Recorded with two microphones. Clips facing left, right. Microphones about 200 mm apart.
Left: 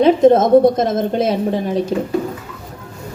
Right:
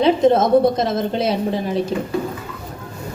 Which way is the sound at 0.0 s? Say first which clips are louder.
Left 4 dB; 50° left (ahead or behind).